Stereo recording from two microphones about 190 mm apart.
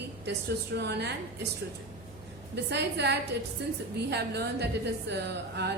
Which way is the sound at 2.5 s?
65° right (ahead or behind).